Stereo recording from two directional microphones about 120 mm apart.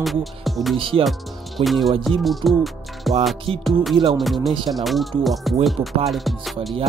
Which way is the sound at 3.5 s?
50° right (ahead or behind).